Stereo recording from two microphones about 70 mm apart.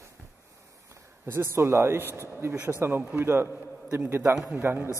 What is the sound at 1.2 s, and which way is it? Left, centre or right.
A man's voice, right.